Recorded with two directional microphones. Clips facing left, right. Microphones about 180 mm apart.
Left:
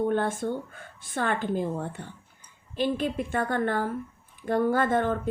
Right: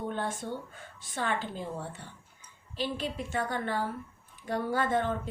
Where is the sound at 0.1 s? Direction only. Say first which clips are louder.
Left 7 dB; 50° left (ahead or behind).